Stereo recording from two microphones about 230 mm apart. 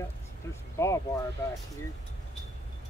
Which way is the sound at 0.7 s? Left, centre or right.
Centre.